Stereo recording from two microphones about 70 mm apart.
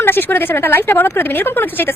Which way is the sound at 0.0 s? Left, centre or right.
Left.